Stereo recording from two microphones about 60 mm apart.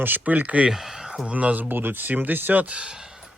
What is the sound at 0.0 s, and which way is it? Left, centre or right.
Speech, right.